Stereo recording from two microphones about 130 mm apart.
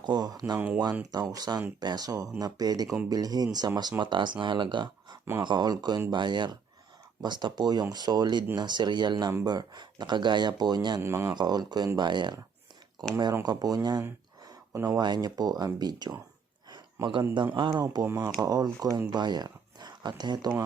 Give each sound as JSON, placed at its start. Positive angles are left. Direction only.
{"t": 0.0, "sound": "speech", "side_deg": -30}
{"t": 11.0, "sound": "speech", "side_deg": -20}
{"t": 11.3, "sound": "speech", "side_deg": -35}
{"t": 13.4, "sound": "speech", "side_deg": -30}
{"t": 16.7, "sound": "a sound", "side_deg": -35}
{"t": 17.3, "sound": "speech", "side_deg": -40}